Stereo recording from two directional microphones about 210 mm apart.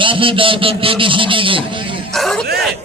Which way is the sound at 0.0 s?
25° right (ahead or behind).